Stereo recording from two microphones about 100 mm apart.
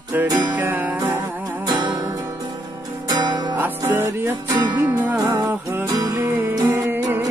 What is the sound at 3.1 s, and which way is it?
Music, 45° right (ahead or behind).